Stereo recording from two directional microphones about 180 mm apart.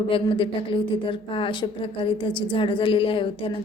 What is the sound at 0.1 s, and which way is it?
Speech, 30° left (ahead or behind).